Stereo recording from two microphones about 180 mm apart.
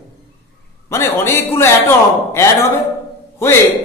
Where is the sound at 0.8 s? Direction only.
15° left (ahead or behind).